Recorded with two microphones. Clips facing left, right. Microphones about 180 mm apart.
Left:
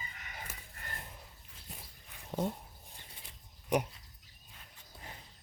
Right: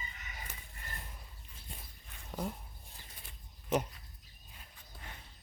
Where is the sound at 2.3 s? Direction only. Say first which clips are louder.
Left 4 dB; 25° left (ahead or behind).